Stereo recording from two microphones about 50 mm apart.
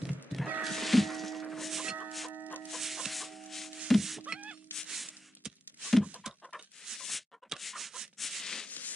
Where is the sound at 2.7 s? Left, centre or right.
Centre.